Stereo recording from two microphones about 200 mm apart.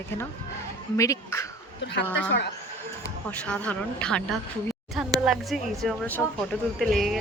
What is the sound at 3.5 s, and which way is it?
Speech, 5° left (ahead or behind).